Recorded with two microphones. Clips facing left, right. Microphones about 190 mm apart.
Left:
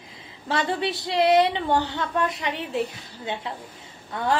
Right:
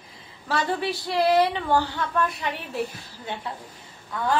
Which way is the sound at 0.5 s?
25° left (ahead or behind).